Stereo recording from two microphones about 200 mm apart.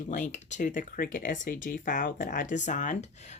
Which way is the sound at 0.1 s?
35° left (ahead or behind).